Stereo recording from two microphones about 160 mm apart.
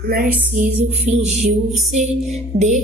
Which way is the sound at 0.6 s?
45° right (ahead or behind).